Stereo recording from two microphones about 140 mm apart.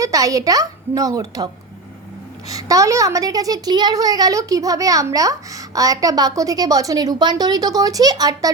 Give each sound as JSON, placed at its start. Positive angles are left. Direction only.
{"t": 0.0, "sound": "a woman's voice", "side_deg": -25}
{"t": 2.5, "sound": "a woman's voice", "side_deg": -25}